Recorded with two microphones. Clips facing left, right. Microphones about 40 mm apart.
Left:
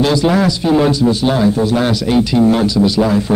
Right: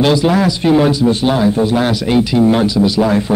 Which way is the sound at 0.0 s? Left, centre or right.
Centre.